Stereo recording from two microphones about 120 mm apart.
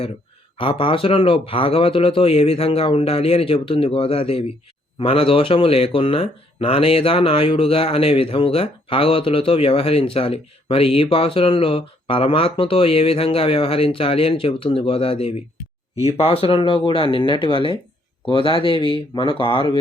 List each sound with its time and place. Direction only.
0.5 s speech: 50° left (ahead or behind)